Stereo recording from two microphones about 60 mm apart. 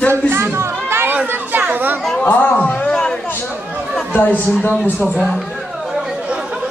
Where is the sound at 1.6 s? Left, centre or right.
Right.